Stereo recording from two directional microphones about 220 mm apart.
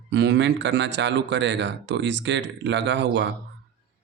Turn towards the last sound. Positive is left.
turn(degrees=-55)  # may be behind; listen again after turning